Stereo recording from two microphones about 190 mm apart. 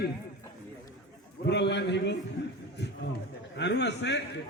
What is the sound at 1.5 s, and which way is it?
Speech, 65° left (ahead or behind).